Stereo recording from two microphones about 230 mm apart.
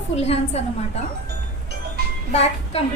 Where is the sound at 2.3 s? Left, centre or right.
Left.